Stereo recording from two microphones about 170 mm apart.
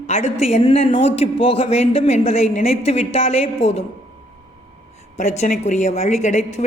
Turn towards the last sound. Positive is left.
turn(degrees=45)  # may be behind; listen again after turning